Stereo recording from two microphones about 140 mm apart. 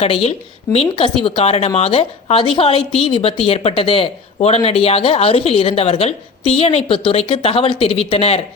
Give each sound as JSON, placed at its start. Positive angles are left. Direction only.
{"t": 0.0, "sound": "a woman's voice", "side_deg": 45}